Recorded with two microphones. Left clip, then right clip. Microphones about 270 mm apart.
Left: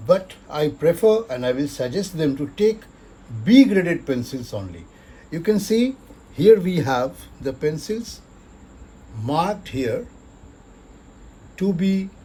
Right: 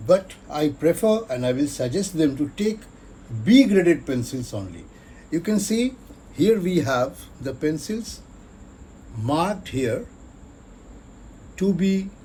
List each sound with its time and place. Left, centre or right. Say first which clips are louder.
0.0 s speech: even; left
9.2 s speech: left 1 dB; left
11.5 s speech: even; left